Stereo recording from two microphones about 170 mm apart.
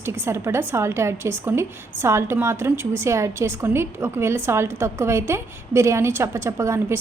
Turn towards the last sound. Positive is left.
turn(degrees=-15)  # may be behind; listen again after turning